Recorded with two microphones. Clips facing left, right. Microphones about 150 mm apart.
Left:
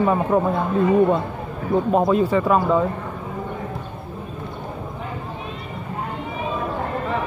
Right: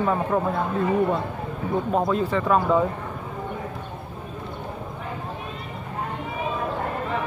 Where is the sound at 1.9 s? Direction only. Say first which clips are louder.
Left 5 dB; 20° left (ahead or behind).